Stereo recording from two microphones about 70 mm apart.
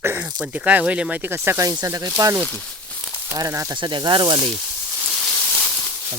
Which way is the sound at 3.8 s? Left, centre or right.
Right.